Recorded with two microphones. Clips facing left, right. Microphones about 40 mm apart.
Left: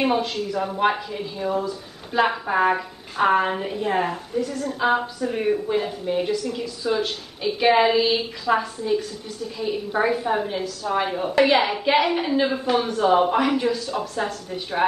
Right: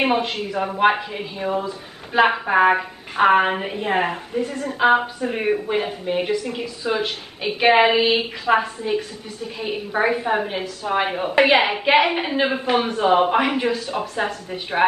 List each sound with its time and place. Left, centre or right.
0.0 s a woman's voice: right